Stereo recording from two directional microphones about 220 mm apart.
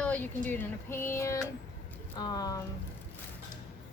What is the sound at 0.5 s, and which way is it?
Female singing, 10° left (ahead or behind).